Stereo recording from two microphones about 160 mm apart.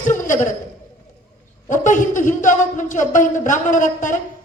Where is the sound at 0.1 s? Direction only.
55° left (ahead or behind).